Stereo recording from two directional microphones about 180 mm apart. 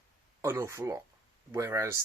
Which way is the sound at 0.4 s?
15° right (ahead or behind).